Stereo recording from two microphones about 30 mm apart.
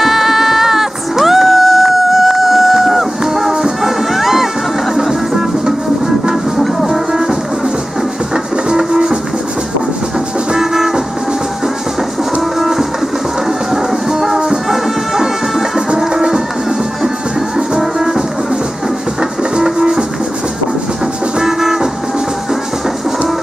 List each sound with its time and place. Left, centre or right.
0.0 s music: centre
6.9 s music: centre
8.7 s music: centre
10.6 s music: centre
12.5 s music: centre
17.6 s music: centre
19.6 s music: centre
21.4 s vehicle: centre